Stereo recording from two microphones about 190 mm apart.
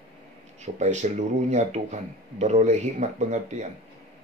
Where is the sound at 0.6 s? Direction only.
40° right (ahead or behind).